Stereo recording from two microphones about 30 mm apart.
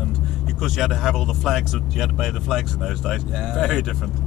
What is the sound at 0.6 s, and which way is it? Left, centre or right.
Speech, centre.